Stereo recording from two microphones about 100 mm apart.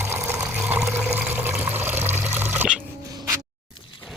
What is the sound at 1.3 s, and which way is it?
Water, 20° right (ahead or behind).